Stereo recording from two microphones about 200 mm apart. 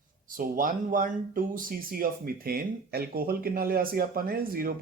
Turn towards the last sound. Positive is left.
turn(degrees=-45)  # may be behind; listen again after turning